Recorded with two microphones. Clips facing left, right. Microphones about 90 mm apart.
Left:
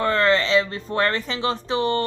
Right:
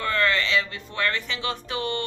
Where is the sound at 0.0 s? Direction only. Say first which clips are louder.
Left 5 dB; 30° left (ahead or behind).